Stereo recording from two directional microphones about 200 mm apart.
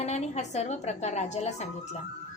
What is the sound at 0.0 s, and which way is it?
A woman's voice, 35° left (ahead or behind).